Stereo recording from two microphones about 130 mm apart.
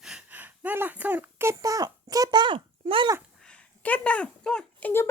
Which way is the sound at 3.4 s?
10° left (ahead or behind).